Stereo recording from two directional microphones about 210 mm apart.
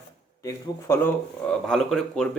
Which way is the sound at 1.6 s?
Centre (ahead or behind).